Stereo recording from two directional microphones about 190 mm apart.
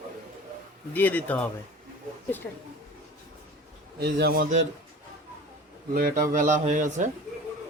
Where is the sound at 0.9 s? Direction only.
10° left (ahead or behind).